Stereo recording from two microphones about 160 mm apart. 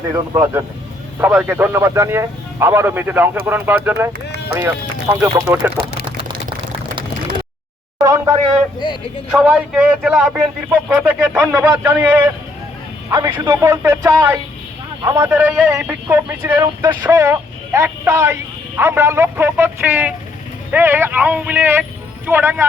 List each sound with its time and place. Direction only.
0.1 s speech: 15° right (ahead or behind)
7.9 s a sound: 20° right (ahead or behind)
9.3 s speech: 10° right (ahead or behind)
13.1 s a man's voice: 25° right (ahead or behind)
15.2 s speech: 10° right (ahead or behind)